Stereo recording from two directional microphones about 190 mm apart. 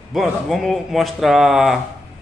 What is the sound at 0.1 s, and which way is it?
Speech, centre (ahead or behind).